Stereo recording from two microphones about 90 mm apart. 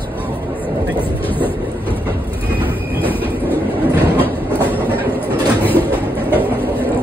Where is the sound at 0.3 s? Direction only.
20° left (ahead or behind).